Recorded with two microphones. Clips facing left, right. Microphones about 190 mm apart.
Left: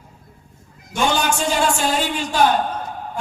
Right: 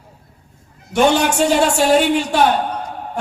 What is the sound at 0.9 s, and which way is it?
A woman's voice, 65° right (ahead or behind).